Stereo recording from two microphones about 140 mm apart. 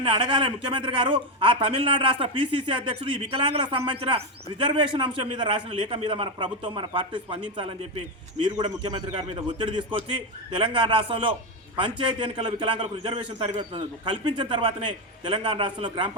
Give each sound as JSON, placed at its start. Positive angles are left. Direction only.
{"t": 0.0, "sound": "a man's voice", "side_deg": -35}